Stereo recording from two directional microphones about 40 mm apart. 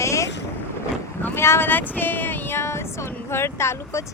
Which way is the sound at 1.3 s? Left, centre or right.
Left.